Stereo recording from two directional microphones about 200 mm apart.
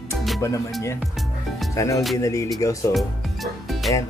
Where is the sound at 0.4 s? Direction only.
15° left (ahead or behind).